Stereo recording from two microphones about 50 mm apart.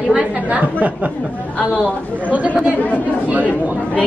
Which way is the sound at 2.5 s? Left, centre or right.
Right.